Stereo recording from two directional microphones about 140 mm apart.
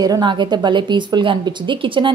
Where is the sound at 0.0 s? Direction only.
30° right (ahead or behind).